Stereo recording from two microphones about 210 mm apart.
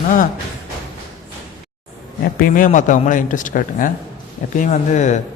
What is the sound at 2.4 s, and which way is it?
A man's voice, 40° left (ahead or behind).